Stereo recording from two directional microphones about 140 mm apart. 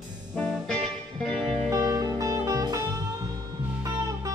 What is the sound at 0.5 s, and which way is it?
Music, 5° left (ahead or behind).